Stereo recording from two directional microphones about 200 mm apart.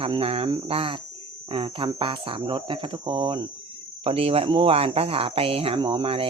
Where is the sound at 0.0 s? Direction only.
30° right (ahead or behind).